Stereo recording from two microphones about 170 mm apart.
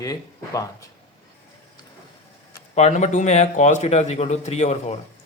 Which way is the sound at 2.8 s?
40° left (ahead or behind).